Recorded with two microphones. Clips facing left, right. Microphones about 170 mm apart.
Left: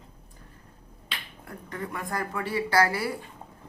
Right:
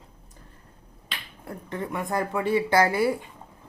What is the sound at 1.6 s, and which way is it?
Speech, 25° right (ahead or behind).